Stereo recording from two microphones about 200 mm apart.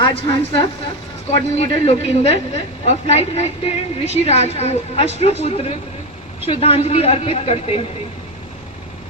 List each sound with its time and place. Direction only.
0.0 s a man's voice: 20° left (ahead or behind)